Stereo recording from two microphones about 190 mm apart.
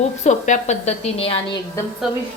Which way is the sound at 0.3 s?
40° left (ahead or behind).